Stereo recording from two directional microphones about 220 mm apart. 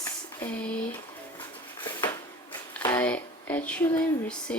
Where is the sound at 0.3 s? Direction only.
5° left (ahead or behind).